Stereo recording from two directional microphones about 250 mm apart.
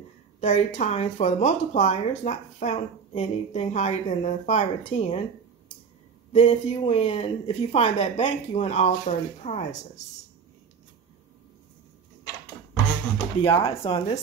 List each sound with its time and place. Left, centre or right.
0.4 s speech: left
6.3 s speech: left
13.4 s speech: left